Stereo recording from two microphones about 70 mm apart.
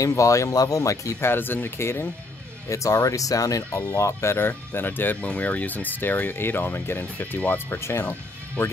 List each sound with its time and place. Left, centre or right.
0.0 s speech: left
1.2 s speech: left
2.7 s speech: left
4.4 s speech: left